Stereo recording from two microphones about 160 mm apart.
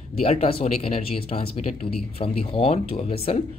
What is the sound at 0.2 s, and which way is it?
Speech, 40° left (ahead or behind).